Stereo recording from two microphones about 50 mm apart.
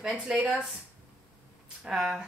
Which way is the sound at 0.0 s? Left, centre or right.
Centre.